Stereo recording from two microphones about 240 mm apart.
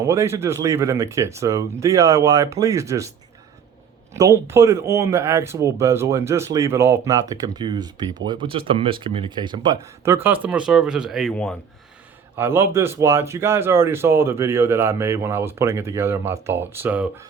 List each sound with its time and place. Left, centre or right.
0.0 s speech: centre
4.1 s speech: centre
12.4 s speech: centre